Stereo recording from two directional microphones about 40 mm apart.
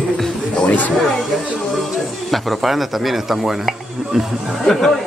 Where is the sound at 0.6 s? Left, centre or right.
Left.